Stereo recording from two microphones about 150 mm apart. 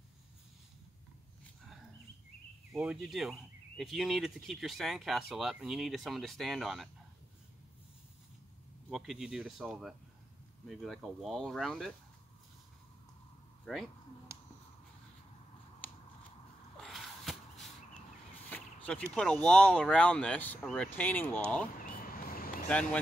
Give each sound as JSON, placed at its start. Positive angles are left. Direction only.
{"t": 2.7, "sound": "speech", "side_deg": -5}
{"t": 8.9, "sound": "speech", "side_deg": 0}
{"t": 13.7, "sound": "speech", "side_deg": 0}
{"t": 15.8, "sound": "finger snapping", "side_deg": 10}
{"t": 16.7, "sound": "a sound", "side_deg": 0}
{"t": 19.1, "sound": "speech", "side_deg": 5}
{"t": 21.8, "sound": "a sound", "side_deg": 70}